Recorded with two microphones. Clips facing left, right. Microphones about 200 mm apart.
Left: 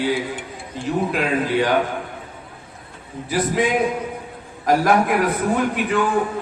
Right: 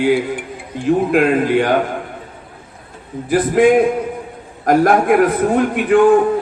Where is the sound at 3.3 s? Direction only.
50° right (ahead or behind).